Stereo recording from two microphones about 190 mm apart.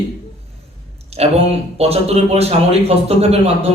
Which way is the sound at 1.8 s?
35° right (ahead or behind).